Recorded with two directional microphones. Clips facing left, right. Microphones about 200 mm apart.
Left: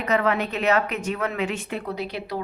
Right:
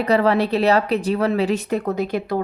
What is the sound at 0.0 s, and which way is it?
A woman's voice, 35° right (ahead or behind).